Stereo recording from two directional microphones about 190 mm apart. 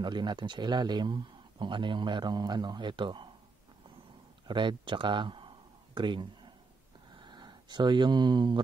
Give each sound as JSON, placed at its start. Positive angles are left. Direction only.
{"t": 0.0, "sound": "speech", "side_deg": -25}
{"t": 4.5, "sound": "speech", "side_deg": -25}